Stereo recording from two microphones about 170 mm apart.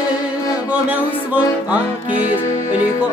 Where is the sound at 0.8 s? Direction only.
10° right (ahead or behind).